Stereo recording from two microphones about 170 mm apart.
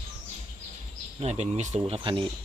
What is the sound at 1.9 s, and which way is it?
Speech, 30° right (ahead or behind).